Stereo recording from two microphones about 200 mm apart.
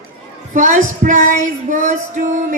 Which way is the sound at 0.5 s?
40° right (ahead or behind).